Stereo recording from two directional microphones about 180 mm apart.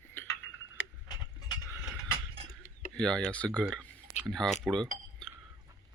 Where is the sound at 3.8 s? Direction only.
10° right (ahead or behind).